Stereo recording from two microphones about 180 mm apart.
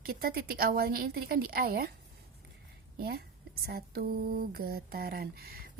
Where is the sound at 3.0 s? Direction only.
60° right (ahead or behind).